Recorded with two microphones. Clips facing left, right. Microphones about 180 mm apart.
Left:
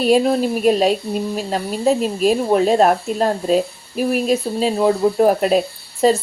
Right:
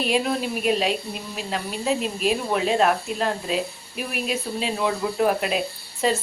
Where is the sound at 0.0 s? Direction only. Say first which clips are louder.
Left 8 dB; 40° left (ahead or behind).